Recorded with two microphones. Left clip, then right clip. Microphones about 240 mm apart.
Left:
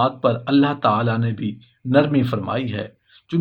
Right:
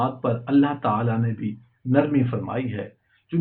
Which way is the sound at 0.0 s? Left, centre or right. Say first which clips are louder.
Left 6 dB; left.